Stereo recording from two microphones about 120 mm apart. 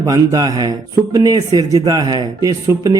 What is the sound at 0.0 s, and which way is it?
Speech, 30° right (ahead or behind).